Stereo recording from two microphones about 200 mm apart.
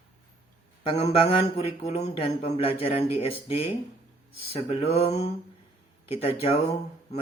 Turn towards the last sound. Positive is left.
turn(degrees=30)  # may be behind; listen again after turning